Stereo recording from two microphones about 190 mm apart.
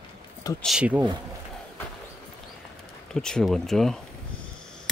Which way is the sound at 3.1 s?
5° left (ahead or behind).